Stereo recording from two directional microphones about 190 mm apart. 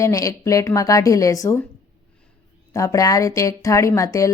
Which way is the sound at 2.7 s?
15° left (ahead or behind).